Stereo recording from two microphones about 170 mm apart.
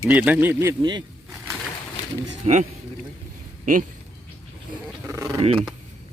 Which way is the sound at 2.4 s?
40° right (ahead or behind).